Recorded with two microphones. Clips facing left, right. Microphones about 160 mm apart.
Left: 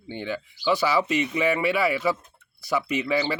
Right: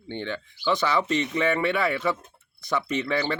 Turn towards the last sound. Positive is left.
turn(degrees=10)  # may be behind; listen again after turning